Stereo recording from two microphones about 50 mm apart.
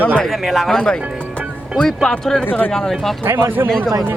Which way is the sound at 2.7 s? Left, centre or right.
Centre.